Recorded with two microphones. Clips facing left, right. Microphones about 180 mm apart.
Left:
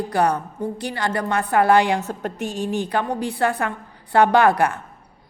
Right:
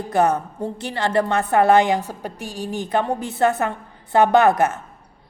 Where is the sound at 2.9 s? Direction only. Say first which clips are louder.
Right 1 dB; 25° right (ahead or behind).